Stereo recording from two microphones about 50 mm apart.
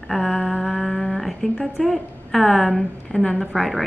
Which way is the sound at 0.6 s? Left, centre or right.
Centre.